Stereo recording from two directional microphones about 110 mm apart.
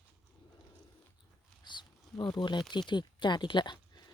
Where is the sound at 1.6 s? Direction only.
45° left (ahead or behind).